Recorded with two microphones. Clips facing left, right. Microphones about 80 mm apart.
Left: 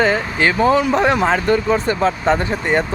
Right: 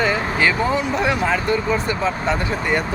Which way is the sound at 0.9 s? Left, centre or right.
Left.